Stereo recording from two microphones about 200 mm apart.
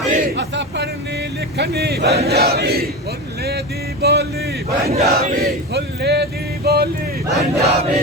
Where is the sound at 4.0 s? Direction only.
55° right (ahead or behind).